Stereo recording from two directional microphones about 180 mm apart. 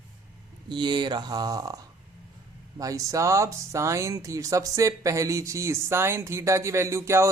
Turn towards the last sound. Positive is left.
turn(degrees=-15)  # may be behind; listen again after turning